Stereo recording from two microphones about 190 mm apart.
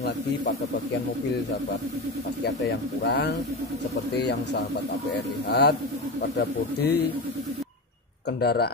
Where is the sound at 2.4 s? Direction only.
60° left (ahead or behind).